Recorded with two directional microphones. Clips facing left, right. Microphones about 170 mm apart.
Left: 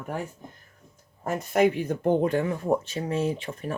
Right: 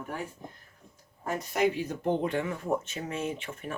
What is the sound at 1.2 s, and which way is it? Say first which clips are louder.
Speech: left 5 dB; 55° left (ahead or behind).